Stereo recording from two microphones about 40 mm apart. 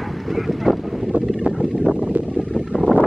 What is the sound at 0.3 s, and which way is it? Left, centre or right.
Boat, centre.